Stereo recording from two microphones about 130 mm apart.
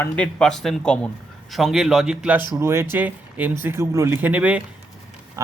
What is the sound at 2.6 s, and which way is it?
Speech, 20° right (ahead or behind).